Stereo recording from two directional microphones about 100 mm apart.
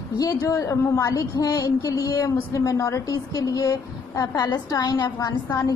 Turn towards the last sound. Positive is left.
turn(degrees=40)  # may be behind; listen again after turning